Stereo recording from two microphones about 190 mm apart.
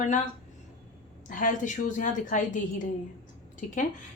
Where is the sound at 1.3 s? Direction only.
45° left (ahead or behind).